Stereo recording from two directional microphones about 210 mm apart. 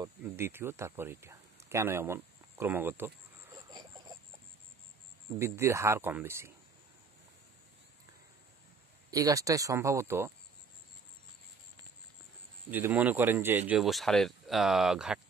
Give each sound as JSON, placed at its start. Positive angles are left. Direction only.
{"t": 0.0, "sound": "speech", "side_deg": -10}
{"t": 5.4, "sound": "speech", "side_deg": -15}
{"t": 9.1, "sound": "speech", "side_deg": -15}
{"t": 12.7, "sound": "speech", "side_deg": -10}